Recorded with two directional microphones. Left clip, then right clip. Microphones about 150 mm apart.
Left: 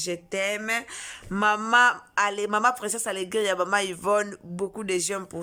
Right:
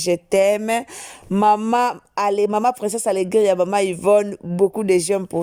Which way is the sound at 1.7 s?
35° right (ahead or behind).